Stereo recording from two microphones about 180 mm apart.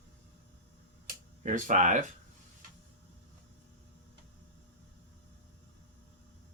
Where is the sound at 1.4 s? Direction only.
45° right (ahead or behind).